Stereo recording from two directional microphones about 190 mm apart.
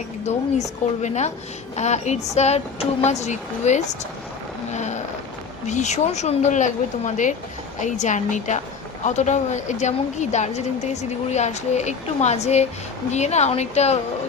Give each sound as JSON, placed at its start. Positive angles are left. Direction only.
{"t": 0.3, "sound": "speech", "side_deg": 35}